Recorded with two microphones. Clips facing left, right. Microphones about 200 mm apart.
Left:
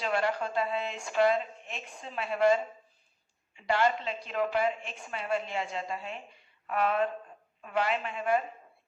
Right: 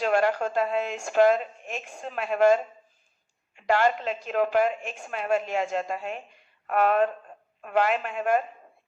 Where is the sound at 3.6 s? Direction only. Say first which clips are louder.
Right 4 dB; 45° right (ahead or behind).